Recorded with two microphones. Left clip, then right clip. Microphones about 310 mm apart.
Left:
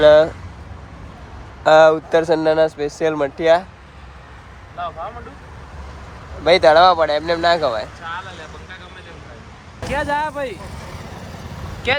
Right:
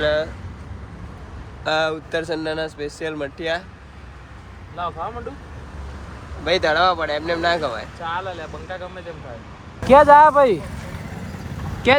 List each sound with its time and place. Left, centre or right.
0.0 s speech: centre
1.6 s speech: centre
4.8 s speech: centre
6.4 s speech: centre
10.0 s speech: centre